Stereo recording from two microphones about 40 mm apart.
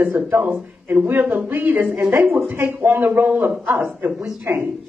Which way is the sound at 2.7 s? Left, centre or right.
Right.